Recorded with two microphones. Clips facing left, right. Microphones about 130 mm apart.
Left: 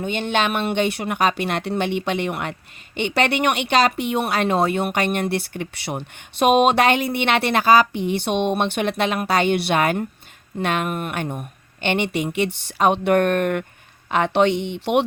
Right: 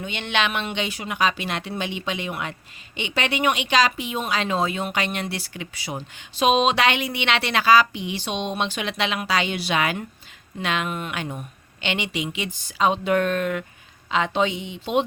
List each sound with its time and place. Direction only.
0.0 s a woman's voice: 45° left (ahead or behind); by 15.0 s 70° left (ahead or behind)